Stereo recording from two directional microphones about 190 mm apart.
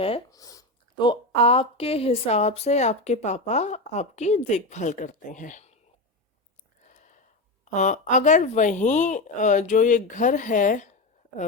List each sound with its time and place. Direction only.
0.3 s speech: 20° left (ahead or behind); by 5.7 s 40° left (ahead or behind)
6.8 s a sound: 40° left (ahead or behind)
7.6 s speech: 40° left (ahead or behind)